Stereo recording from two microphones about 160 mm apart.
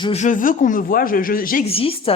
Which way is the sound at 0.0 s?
45° left (ahead or behind).